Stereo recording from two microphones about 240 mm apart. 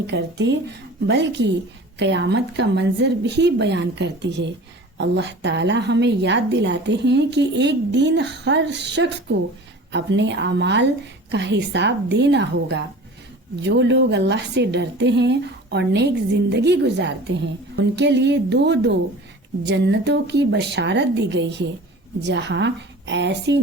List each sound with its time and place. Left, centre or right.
0.1 s a woman's voice: right